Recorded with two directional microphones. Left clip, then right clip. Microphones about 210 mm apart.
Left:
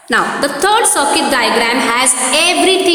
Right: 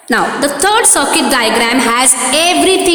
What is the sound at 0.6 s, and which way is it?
A woman's voice, 30° right (ahead or behind).